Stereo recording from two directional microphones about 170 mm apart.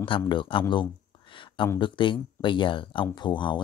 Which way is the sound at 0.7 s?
30° left (ahead or behind).